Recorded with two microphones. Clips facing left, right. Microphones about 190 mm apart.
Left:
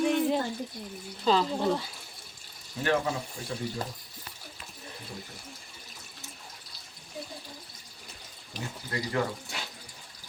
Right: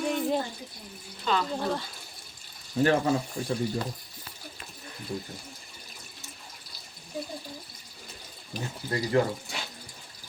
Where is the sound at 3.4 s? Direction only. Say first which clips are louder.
Right 8 dB; 35° right (ahead or behind).